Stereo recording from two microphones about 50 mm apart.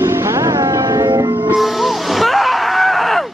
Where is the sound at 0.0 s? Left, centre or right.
Right.